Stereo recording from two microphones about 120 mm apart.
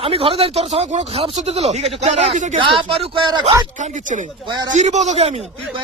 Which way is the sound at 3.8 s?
90° right.